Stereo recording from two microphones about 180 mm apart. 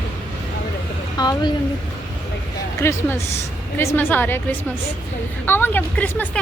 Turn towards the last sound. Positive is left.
turn(degrees=10)  # may be behind; listen again after turning